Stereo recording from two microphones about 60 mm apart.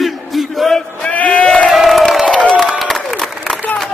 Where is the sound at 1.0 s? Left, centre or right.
Left.